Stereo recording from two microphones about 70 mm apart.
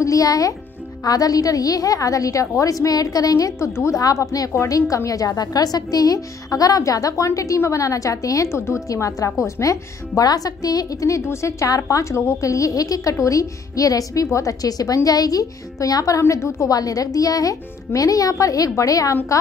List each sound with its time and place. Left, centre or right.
0.0 s a child's voice: left
16.7 s speech: left